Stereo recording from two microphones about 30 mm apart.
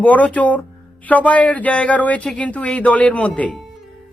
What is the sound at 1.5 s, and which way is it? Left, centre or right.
Speech, left.